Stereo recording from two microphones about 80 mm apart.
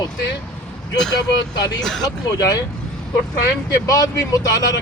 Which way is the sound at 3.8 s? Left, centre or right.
Left.